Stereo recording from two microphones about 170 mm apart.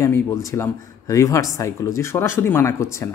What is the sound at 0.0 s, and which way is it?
Speech, 15° left (ahead or behind).